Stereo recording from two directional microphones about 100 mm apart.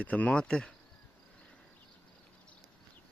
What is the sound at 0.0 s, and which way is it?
Insect, 15° left (ahead or behind).